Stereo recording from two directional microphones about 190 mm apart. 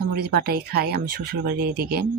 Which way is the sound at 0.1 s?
55° right (ahead or behind).